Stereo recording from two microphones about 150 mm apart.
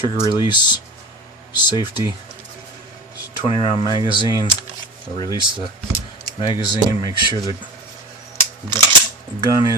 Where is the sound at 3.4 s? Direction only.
40° left (ahead or behind).